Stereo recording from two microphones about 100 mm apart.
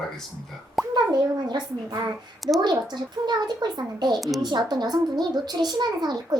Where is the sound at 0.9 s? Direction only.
45° right (ahead or behind).